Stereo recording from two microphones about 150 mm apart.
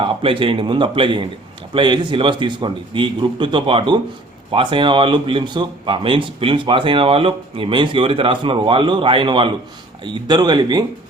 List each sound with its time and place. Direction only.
0.0 s speech: 35° right (ahead or behind)